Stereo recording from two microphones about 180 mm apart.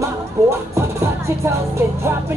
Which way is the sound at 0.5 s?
15° right (ahead or behind).